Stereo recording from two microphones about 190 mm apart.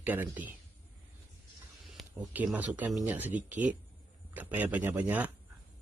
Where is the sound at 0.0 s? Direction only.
10° right (ahead or behind).